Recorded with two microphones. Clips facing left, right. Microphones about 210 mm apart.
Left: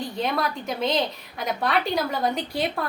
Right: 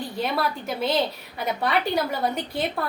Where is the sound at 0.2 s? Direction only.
5° right (ahead or behind).